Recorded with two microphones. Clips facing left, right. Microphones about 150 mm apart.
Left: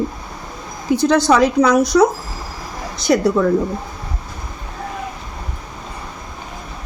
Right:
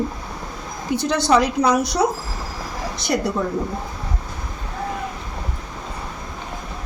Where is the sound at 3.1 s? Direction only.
90° left.